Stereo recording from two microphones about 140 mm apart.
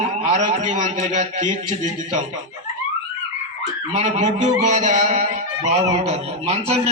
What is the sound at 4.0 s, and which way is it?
A man's voice, 60° right (ahead or behind).